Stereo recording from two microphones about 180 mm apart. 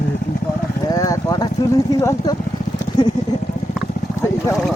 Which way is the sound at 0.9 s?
20° left (ahead or behind).